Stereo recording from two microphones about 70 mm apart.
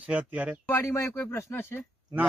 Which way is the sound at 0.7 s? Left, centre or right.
Left.